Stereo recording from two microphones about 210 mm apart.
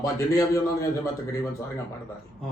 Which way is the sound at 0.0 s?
15° left (ahead or behind).